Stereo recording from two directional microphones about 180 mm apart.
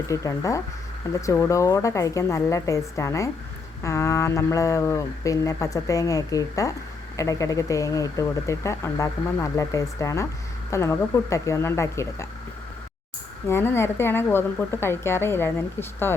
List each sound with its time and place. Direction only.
0.1 s speech: 20° left (ahead or behind)
13.5 s speech: 15° left (ahead or behind)